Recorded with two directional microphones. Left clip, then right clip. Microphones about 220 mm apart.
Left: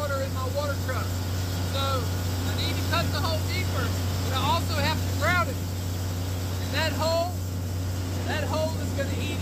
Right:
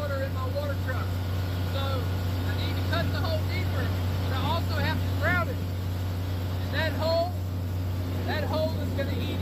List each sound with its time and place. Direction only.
4.5 s vehicle: 20° left (ahead or behind)
6.8 s vehicle: 15° left (ahead or behind)
8.3 s vehicle: centre (ahead or behind)